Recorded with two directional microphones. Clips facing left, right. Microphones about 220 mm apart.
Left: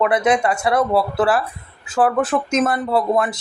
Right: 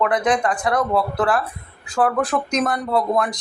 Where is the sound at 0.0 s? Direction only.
10° left (ahead or behind).